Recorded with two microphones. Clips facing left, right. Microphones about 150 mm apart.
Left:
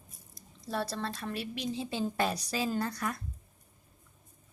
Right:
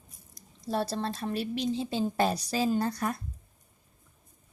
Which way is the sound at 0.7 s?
30° right (ahead or behind).